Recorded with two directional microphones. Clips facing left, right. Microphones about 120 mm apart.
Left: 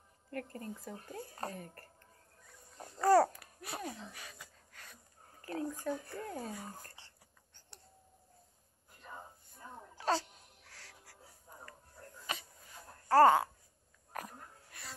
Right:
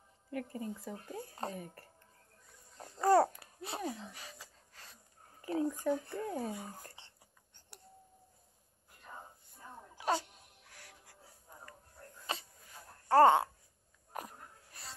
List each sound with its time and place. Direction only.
0.3 s speech: 10° right (ahead or behind)
1.4 s speech: 15° right (ahead or behind)
3.0 s babbling: 20° right (ahead or behind)
5.4 s speech: 15° right (ahead or behind)
9.9 s wail: 15° right (ahead or behind)
12.3 s a sound: 30° right (ahead or behind)
13.1 s speech: 25° right (ahead or behind)
14.1 s a sound: 25° right (ahead or behind)